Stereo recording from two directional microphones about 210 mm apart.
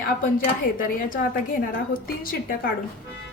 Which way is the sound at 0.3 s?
40° left (ahead or behind).